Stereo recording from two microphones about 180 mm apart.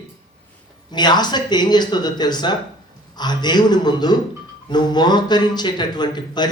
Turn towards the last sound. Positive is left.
turn(degrees=25)  # may be behind; listen again after turning